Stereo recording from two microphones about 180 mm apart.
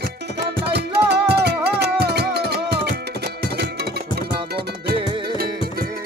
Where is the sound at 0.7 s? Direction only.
65° right (ahead or behind).